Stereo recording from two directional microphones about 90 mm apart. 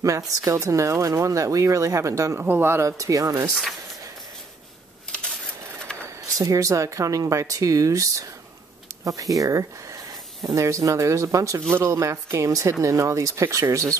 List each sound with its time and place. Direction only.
0.0 s speech: 35° right (ahead or behind)
2.4 s speech: 25° right (ahead or behind); by 3.4 s 40° right (ahead or behind)
6.2 s speech: 40° right (ahead or behind)